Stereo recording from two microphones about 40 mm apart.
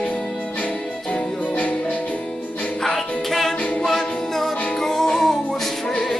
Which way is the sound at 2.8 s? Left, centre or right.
Centre.